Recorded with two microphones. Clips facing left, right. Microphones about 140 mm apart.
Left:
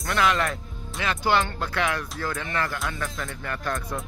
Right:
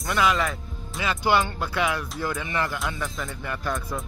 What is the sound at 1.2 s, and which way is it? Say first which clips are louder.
Speech: right 1 dB; 10° right (ahead or behind).